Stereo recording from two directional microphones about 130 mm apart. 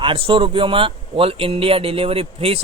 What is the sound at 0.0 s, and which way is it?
A man's voice, 45° right (ahead or behind).